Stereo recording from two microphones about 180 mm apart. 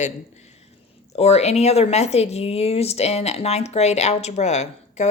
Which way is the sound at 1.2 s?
35° left (ahead or behind).